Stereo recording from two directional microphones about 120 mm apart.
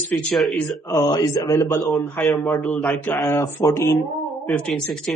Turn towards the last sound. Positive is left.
turn(degrees=5)  # may be behind; listen again after turning